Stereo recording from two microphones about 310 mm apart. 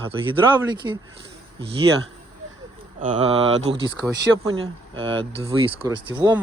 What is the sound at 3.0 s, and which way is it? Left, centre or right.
Speech, centre.